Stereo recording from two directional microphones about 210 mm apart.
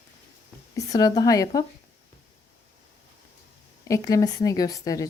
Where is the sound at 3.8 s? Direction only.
15° left (ahead or behind).